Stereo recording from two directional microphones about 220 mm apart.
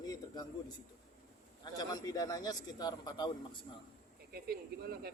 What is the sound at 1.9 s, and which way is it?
A man's voice, 15° left (ahead or behind).